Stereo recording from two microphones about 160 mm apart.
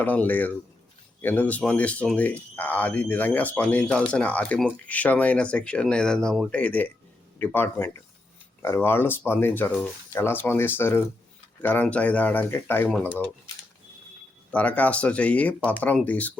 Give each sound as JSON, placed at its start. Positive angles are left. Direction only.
{"t": 0.0, "sound": "speech", "side_deg": 10}
{"t": 14.5, "sound": "speech", "side_deg": 10}